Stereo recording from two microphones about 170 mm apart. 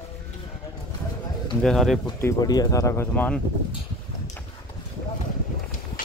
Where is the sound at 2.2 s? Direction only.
20° left (ahead or behind).